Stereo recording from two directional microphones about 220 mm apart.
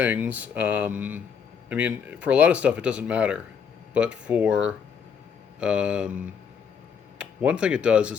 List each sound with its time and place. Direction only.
0.0 s speech: 5° right (ahead or behind)